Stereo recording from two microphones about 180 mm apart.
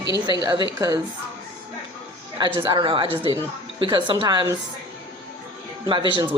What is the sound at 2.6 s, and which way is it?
A woman's voice, 25° right (ahead or behind).